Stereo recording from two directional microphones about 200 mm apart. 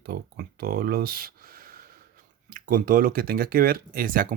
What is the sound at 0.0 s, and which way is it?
Speech, 50° right (ahead or behind).